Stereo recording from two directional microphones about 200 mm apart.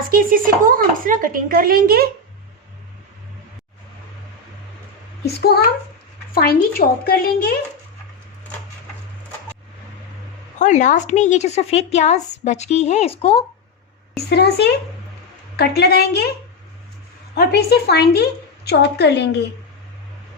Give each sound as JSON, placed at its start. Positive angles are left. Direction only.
{"t": 0.1, "sound": "speech", "side_deg": -45}
{"t": 5.2, "sound": "a woman's voice", "side_deg": 50}
{"t": 10.6, "sound": "a woman's voice", "side_deg": 35}
{"t": 14.3, "sound": "a woman's voice", "side_deg": 55}
{"t": 17.3, "sound": "a woman's voice", "side_deg": 55}